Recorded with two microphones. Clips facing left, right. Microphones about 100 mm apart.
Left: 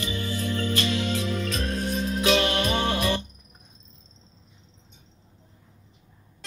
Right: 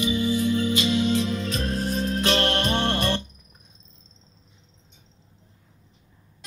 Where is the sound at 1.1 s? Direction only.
30° right (ahead or behind).